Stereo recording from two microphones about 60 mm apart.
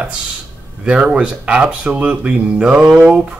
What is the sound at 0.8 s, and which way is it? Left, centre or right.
Speech, centre.